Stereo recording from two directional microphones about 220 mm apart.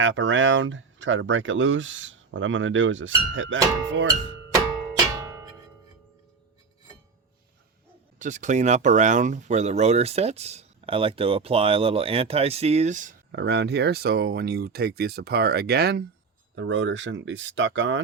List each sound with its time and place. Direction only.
0.0 s speech: 60° right (ahead or behind)
5.1 s music: 15° right (ahead or behind)
8.2 s speech: 35° right (ahead or behind)
13.3 s speech: 50° right (ahead or behind)
16.6 s speech: 55° right (ahead or behind)